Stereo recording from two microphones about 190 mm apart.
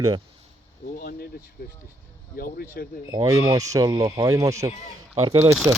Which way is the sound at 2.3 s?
50° left (ahead or behind).